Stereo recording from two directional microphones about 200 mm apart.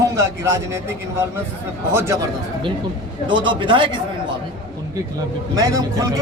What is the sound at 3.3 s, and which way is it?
Speech, 25° right (ahead or behind).